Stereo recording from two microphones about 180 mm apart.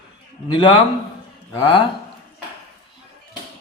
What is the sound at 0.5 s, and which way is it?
Speech, 25° left (ahead or behind).